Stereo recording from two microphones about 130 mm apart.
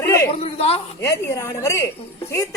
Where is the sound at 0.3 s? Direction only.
50° left (ahead or behind).